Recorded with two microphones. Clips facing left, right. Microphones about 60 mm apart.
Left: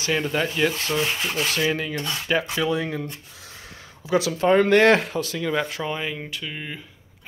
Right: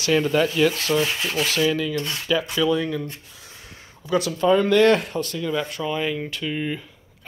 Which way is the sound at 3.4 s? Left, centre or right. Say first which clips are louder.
Left 2 dB; left.